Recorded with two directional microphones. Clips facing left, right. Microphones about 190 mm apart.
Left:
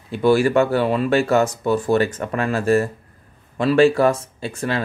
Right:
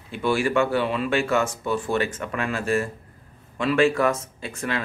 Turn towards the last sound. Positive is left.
turn(degrees=35)  # may be behind; listen again after turning